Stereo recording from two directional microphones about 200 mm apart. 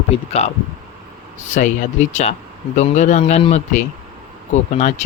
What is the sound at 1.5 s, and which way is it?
Speech, 35° left (ahead or behind).